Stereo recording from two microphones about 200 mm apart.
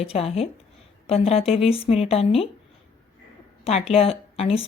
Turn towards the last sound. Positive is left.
turn(degrees=30)  # may be behind; listen again after turning